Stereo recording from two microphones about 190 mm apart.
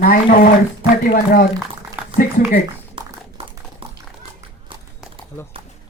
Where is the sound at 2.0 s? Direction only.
10° right (ahead or behind).